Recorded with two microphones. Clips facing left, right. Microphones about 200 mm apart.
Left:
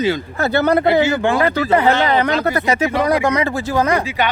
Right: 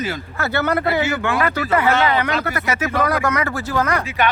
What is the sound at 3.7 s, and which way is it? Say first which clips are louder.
Speech: left 4 dB; 20° left (ahead or behind).